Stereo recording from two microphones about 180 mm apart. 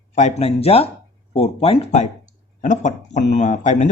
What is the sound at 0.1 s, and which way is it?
Speech, 40° left (ahead or behind).